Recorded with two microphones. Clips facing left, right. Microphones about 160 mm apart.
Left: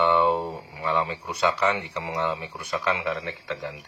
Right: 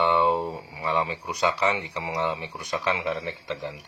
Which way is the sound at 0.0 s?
15° right (ahead or behind).